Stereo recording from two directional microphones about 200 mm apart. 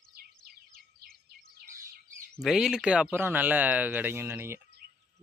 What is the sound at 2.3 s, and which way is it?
Speech, centre (ahead or behind).